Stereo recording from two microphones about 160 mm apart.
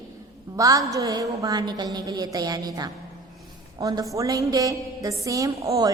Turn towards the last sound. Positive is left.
turn(degrees=-20)  # may be behind; listen again after turning